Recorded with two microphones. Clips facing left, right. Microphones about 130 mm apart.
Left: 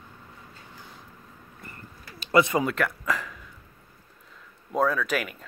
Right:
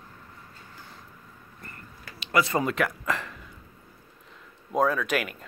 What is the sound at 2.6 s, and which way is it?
Speech, centre (ahead or behind).